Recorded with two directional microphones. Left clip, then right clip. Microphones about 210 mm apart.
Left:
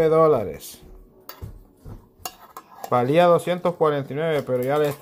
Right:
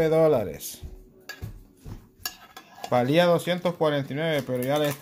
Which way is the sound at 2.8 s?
5° left (ahead or behind).